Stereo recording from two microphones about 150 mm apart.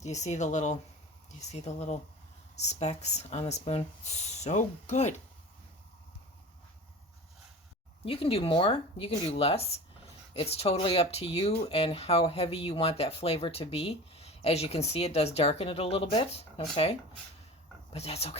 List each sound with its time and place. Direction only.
0.0 s speech: 50° left (ahead or behind)
8.0 s speech: 40° left (ahead or behind)
17.9 s speech: 45° left (ahead or behind)